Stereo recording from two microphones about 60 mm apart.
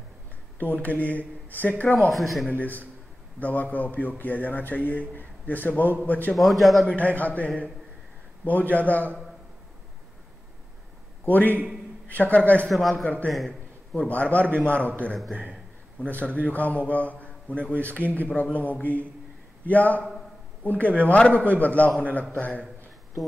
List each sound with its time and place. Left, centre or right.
0.6 s speech: left
2.0 s a man's voice: centre
2.5 s speech: left
6.3 s a man's voice: centre
6.9 s speech: left
11.2 s speech: left
12.6 s a man's voice: centre
14.0 s speech: left
16.0 s a man's voice: left